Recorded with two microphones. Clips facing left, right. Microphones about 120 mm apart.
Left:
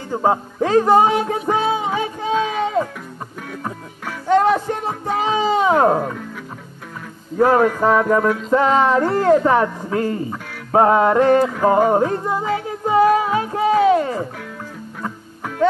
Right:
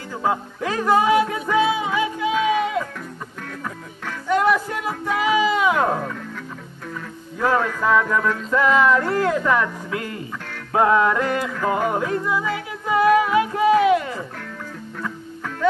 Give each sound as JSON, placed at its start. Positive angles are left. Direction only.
{"t": 0.1, "sound": "music", "side_deg": 40}
{"t": 4.3, "sound": "a sound", "side_deg": 35}
{"t": 5.9, "sound": "speech", "side_deg": 20}
{"t": 7.3, "sound": "music", "side_deg": 40}
{"t": 7.8, "sound": "speech", "side_deg": 40}
{"t": 11.9, "sound": "music", "side_deg": 40}